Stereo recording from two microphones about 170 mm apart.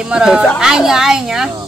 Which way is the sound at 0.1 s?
5° right (ahead or behind).